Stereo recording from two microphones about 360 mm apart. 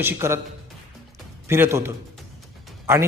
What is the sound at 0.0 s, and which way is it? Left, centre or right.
Speech, centre.